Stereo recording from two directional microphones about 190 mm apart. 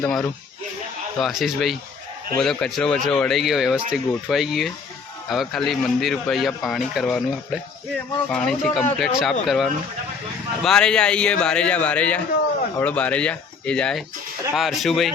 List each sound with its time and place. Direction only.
0.0 s a man's voice: centre (ahead or behind)